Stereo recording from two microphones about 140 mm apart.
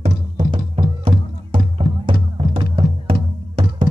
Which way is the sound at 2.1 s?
40° right (ahead or behind).